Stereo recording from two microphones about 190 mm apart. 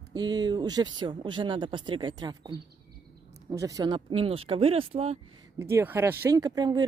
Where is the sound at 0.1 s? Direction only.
20° right (ahead or behind).